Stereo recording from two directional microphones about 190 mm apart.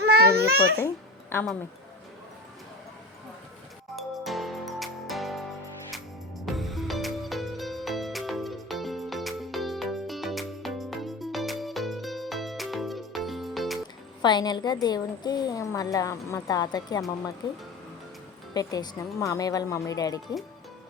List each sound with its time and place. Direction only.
0.0 s babbling: 55° right (ahead or behind)
3.9 s music: centre (ahead or behind)
14.2 s a woman's voice: 20° left (ahead or behind)